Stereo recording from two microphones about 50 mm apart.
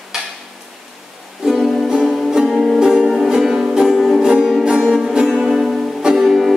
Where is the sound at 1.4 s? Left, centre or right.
Centre.